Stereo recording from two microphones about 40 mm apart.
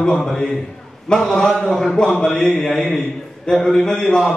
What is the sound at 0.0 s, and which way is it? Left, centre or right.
Speech, centre.